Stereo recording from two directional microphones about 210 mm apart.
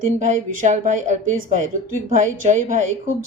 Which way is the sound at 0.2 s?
35° right (ahead or behind).